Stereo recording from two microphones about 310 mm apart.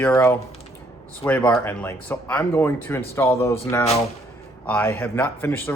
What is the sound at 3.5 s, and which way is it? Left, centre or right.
Speech, centre.